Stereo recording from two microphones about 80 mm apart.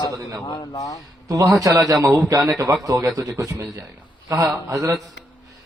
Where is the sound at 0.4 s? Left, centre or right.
Left.